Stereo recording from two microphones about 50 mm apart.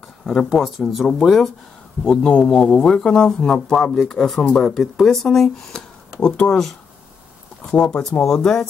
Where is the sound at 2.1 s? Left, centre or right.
Centre.